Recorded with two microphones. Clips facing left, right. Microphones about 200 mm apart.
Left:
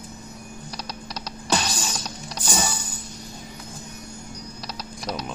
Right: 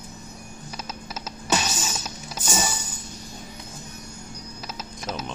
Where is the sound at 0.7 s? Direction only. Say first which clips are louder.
Right 1 dB; 5° right (ahead or behind).